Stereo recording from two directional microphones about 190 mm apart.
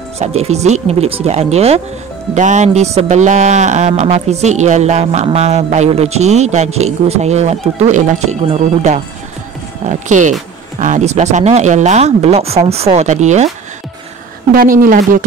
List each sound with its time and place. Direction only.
0.2 s speech: 35° right (ahead or behind)
14.5 s speech: 50° right (ahead or behind)